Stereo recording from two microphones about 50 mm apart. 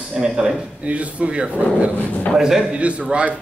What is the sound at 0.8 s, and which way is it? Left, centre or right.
Speech, right.